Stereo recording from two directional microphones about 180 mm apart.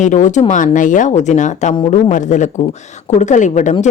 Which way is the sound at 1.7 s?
25° left (ahead or behind).